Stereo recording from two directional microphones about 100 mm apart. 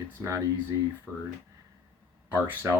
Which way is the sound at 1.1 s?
5° left (ahead or behind).